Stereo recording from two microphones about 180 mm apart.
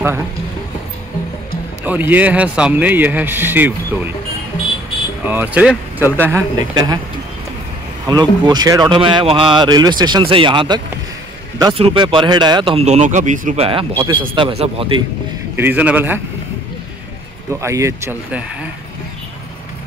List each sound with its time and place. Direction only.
1.9 s speech: 10° right (ahead or behind)
5.2 s speech: 10° right (ahead or behind)
6.7 s speech: 20° right (ahead or behind)
8.1 s speech: 20° right (ahead or behind); by 13.6 s 45° right (ahead or behind)
13.6 s speech: 30° right (ahead or behind)
15.5 s speech: 10° right (ahead or behind)
17.5 s speech: 15° right (ahead or behind)